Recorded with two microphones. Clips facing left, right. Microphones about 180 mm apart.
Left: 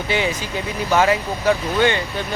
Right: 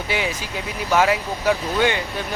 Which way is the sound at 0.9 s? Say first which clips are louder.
Left 1 dB; 5° right (ahead or behind).